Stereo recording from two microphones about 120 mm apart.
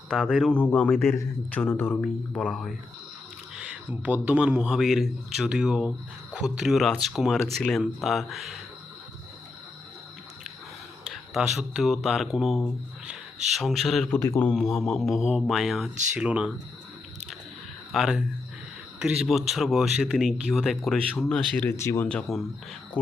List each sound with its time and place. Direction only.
0.1 s speech: 5° left (ahead or behind)
3.5 s a man's voice: 10° right (ahead or behind)
11.3 s speech: centre (ahead or behind)
14.1 s speech: 20° left (ahead or behind)
14.5 s a man's voice: 5° left (ahead or behind)
17.9 s speech: centre (ahead or behind)
21.7 s speech: 20° left (ahead or behind)
22.0 s speech: 5° left (ahead or behind)